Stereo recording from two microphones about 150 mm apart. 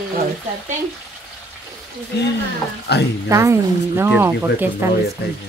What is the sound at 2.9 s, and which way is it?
Speech, 90° left.